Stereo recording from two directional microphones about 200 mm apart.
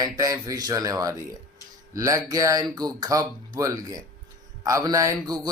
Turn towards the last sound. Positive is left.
turn(degrees=-20)  # may be behind; listen again after turning